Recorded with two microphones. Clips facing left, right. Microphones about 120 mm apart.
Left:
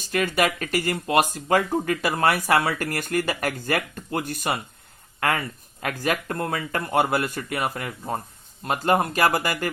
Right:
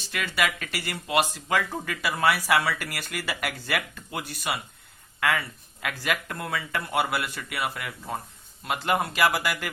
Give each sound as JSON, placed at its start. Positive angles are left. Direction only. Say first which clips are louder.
{"t": 0.1, "sound": "speech", "louder": "left 5 dB", "side_deg": 45}